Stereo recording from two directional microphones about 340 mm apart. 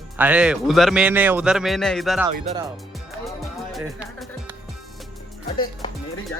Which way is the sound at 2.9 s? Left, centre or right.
Centre.